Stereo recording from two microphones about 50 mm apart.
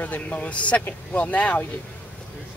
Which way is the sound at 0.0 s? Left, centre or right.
Left.